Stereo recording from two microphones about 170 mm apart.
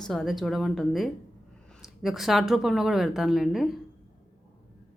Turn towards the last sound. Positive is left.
turn(degrees=0)  # may be behind; listen again after turning